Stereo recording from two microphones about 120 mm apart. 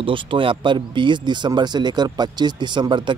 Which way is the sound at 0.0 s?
45° right (ahead or behind).